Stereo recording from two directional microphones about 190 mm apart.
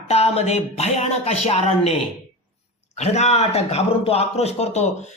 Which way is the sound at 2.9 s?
35° left (ahead or behind).